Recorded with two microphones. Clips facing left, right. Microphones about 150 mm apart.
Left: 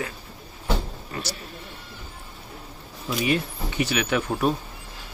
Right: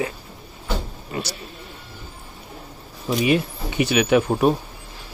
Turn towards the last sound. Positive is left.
turn(degrees=-20)  # may be behind; listen again after turning